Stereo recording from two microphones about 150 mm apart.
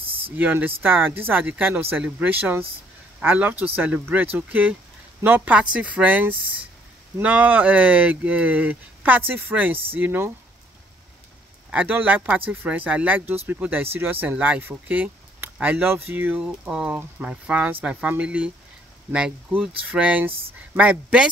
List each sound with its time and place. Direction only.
0.0 s a sound: 40° right (ahead or behind)
0.4 s speech: 10° right (ahead or behind)
11.7 s speech: 10° right (ahead or behind)